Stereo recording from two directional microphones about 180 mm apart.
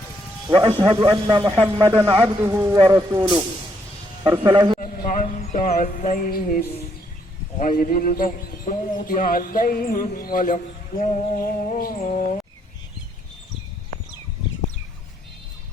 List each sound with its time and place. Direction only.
0.4 s a man's voice: 20° right (ahead or behind)
4.3 s speech: 20° right (ahead or behind)
4.8 s a man's voice: 50° left (ahead or behind)
11.9 s speech: 40° left (ahead or behind)